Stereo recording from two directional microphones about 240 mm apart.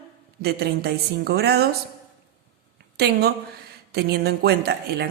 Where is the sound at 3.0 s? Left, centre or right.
Right.